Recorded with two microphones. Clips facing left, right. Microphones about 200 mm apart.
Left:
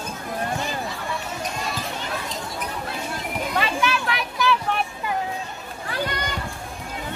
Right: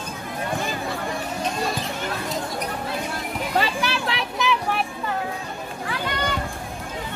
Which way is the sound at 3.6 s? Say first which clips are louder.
Even; 35° right (ahead or behind).